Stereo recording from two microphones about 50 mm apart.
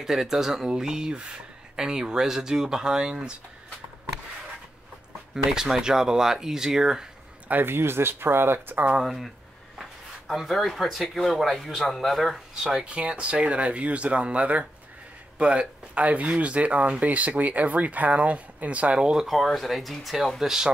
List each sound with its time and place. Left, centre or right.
0.0 s speech: centre
5.3 s speech: centre
7.6 s speech: right
9.0 s a man's voice: centre
12.8 s speech: right
18.9 s speech: centre
19.2 s a man's voice: centre